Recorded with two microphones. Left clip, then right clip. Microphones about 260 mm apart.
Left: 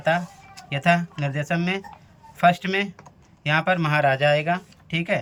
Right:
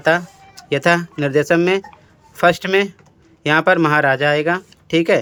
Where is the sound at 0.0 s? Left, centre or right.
Centre.